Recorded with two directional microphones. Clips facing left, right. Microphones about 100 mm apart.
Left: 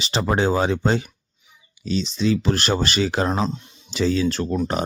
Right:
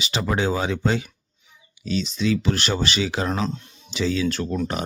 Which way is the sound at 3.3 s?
25° left (ahead or behind).